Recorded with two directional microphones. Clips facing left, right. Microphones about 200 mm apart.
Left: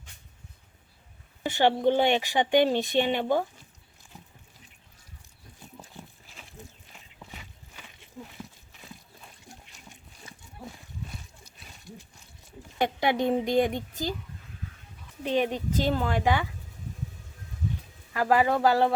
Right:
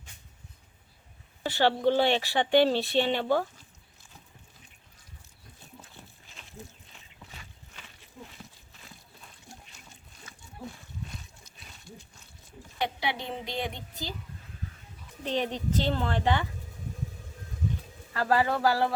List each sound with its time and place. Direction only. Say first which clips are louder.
1.5 s speech: left 1 dB; 15° left (ahead or behind)
12.8 s a woman's voice: left 7 dB; 50° left (ahead or behind)
15.2 s speech: left 4 dB; 10° left (ahead or behind)
18.1 s speech: left 3 dB; 15° left (ahead or behind)